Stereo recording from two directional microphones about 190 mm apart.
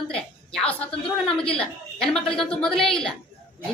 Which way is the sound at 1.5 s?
5° left (ahead or behind).